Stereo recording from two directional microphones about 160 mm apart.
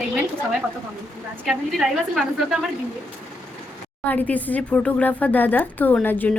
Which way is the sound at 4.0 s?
10° left (ahead or behind).